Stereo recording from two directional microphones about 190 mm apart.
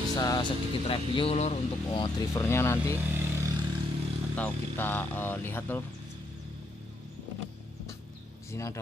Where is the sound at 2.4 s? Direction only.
15° left (ahead or behind).